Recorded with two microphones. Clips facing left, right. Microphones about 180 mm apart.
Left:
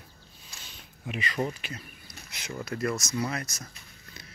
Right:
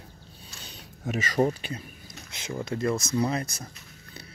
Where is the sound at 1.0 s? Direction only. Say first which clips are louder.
Right 6 dB; 45° right (ahead or behind).